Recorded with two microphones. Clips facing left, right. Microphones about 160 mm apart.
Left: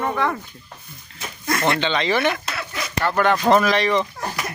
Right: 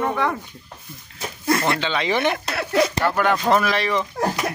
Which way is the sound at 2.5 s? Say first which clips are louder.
Right 11 dB; 65° right (ahead or behind).